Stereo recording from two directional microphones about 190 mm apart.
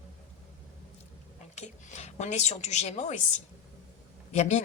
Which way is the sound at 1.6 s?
35° left (ahead or behind).